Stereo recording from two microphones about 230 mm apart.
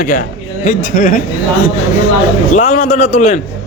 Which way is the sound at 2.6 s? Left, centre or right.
Left.